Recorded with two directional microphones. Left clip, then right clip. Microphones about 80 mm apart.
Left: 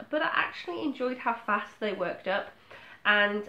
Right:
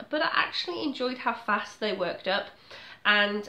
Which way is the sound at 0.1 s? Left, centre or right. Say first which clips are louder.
Right 2 dB; right.